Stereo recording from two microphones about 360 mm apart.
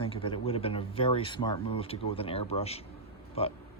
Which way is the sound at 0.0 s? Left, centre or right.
Centre.